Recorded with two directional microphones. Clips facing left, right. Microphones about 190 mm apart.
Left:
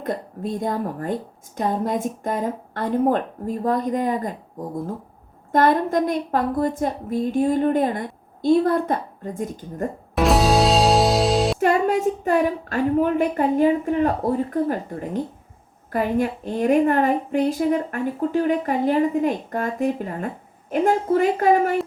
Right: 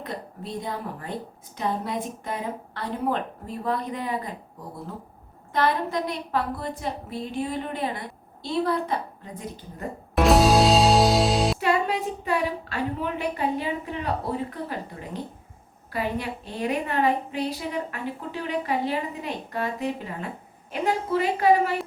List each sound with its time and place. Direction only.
0.0 s a woman's voice: 50° left (ahead or behind)
10.2 s music: centre (ahead or behind)
11.6 s a woman's voice: 45° left (ahead or behind)